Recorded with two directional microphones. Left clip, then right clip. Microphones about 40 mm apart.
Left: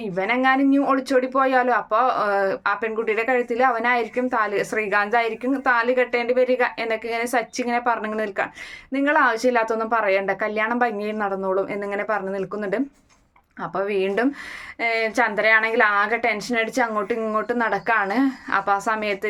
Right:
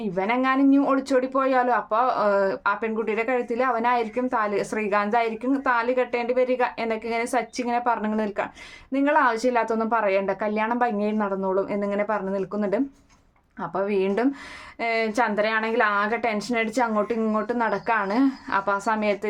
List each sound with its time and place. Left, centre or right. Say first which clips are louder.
0.0 s a woman's voice: left 3 dB; right